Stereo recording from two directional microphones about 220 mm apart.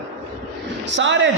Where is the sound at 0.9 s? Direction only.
55° right (ahead or behind).